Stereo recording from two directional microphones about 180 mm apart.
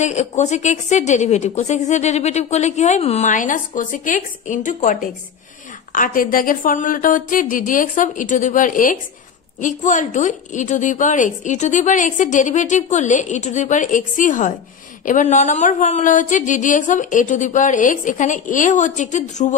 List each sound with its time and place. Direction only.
0.0 s a woman's voice: 40° left (ahead or behind)